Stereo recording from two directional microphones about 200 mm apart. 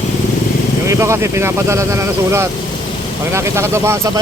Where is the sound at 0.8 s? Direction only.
15° right (ahead or behind).